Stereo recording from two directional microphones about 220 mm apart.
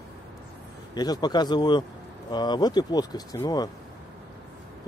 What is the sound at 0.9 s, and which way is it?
Speech, 20° left (ahead or behind).